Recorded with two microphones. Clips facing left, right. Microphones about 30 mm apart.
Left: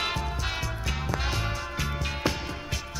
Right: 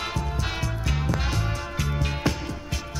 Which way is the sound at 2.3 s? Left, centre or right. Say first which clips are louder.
Right 1 dB; centre.